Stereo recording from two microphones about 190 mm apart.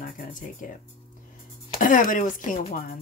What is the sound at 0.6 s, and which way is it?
Speech, 45° left (ahead or behind).